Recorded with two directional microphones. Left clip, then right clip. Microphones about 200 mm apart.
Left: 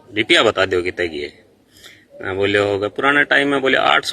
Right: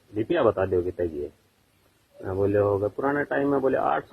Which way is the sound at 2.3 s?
35° left (ahead or behind).